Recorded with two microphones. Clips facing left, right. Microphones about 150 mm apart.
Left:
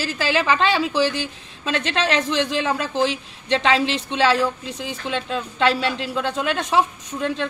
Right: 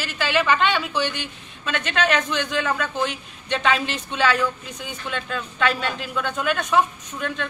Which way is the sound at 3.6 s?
90° left.